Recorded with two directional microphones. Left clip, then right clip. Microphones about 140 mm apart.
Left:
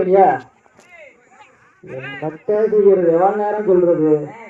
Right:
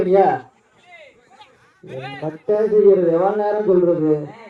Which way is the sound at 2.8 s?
25° left (ahead or behind).